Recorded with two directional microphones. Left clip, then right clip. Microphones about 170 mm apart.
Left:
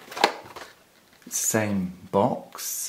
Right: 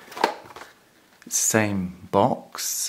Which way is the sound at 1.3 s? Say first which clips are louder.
Right 3 dB; 30° right (ahead or behind).